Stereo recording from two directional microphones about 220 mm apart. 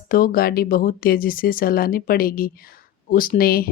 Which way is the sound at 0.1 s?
40° left (ahead or behind).